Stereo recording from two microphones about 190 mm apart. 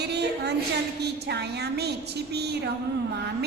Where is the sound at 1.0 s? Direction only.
60° right (ahead or behind).